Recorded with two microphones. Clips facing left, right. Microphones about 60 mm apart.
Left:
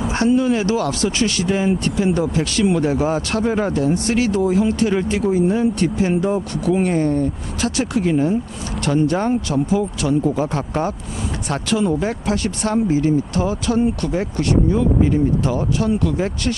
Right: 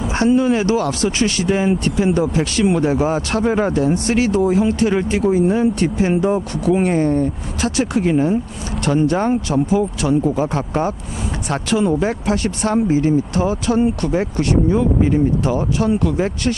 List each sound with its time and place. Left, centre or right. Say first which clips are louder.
0.1 s speech: right 2 dB; centre